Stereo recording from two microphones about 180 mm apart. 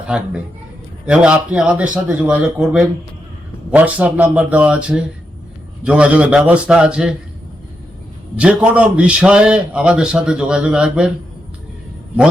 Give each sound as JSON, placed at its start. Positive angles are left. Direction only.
{"t": 0.1, "sound": "a man's voice", "side_deg": -5}
{"t": 8.4, "sound": "a man's voice", "side_deg": -5}